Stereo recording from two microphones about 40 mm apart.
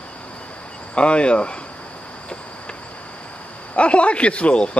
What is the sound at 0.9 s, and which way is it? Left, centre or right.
Speech, left.